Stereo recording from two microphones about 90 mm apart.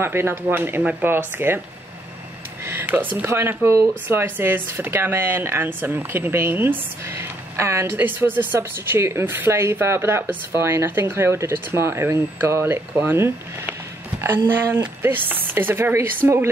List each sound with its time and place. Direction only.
0.0 s speech: 25° right (ahead or behind)
2.6 s a sound: 25° right (ahead or behind)
3.3 s speech: 30° right (ahead or behind)
15.0 s speech: 20° right (ahead or behind)